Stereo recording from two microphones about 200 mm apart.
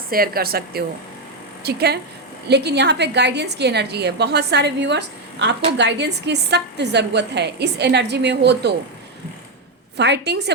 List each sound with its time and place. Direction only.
0.1 s a woman's voice: 50° right (ahead or behind)
10.0 s a woman's voice: 55° right (ahead or behind)